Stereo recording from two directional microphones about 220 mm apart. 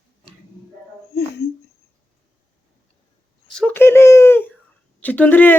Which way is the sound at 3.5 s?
5° left (ahead or behind).